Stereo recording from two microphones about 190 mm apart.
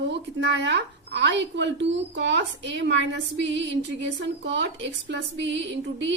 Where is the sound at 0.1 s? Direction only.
65° right (ahead or behind).